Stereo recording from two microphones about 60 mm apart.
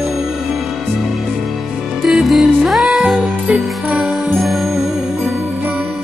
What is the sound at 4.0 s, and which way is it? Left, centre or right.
Music, centre.